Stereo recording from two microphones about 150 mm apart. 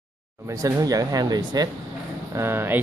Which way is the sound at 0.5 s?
20° right (ahead or behind).